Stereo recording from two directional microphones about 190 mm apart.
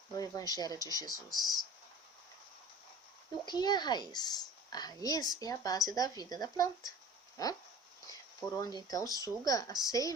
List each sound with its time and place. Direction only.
0.2 s speech: 20° left (ahead or behind)
3.4 s speech: 20° left (ahead or behind)
8.5 s speech: 20° left (ahead or behind)